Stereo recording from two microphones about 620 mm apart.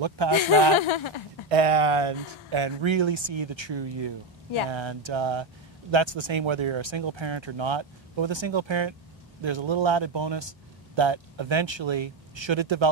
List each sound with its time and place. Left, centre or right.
0.7 s speech: left
1.5 s speech: right